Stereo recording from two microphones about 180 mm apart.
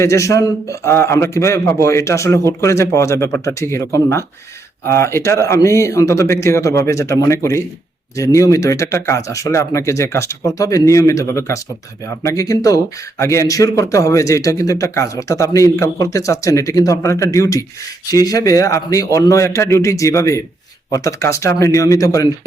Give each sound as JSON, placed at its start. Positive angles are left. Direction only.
{"t": 0.0, "sound": "speech", "side_deg": 15}